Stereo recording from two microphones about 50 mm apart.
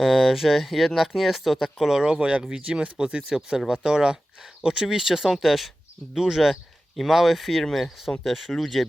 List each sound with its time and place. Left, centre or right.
0.0 s speech: centre